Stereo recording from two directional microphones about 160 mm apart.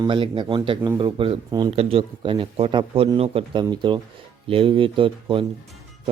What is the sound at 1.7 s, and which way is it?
A man's voice, 40° right (ahead or behind).